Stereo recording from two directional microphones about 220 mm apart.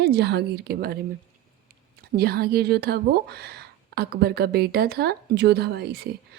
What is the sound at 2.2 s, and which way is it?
A woman's voice, 45° right (ahead or behind).